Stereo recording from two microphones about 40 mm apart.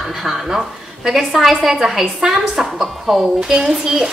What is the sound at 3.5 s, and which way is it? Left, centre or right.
Speech, centre.